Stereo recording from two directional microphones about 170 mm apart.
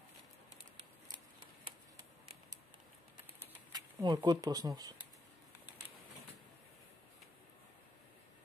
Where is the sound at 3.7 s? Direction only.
25° right (ahead or behind).